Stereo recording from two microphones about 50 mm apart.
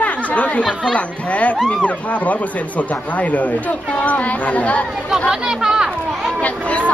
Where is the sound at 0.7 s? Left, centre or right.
Centre.